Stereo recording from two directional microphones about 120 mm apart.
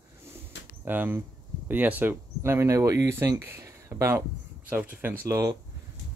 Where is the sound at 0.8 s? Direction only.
15° right (ahead or behind).